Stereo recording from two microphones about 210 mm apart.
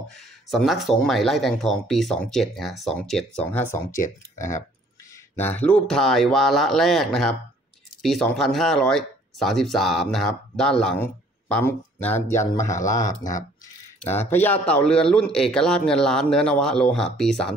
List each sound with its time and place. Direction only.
0.5 s speech: centre (ahead or behind)
4.0 s speech: 35° left (ahead or behind)
5.3 s speech: 10° left (ahead or behind)